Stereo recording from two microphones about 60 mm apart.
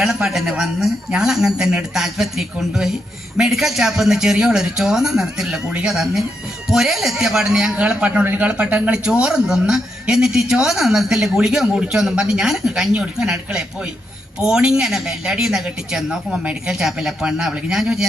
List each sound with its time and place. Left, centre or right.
0.0 s a man's voice: centre
5.9 s speech: centre
7.8 s a man's voice: centre
8.2 s a man's voice: right
8.4 s speech: centre
16.6 s speech: centre